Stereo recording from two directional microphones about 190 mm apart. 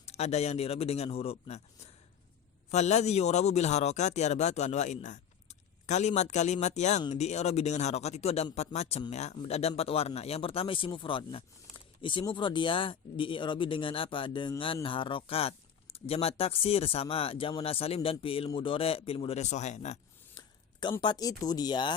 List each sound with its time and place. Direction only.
0.0 s speech: 35° left (ahead or behind)
20.8 s speech: 25° left (ahead or behind)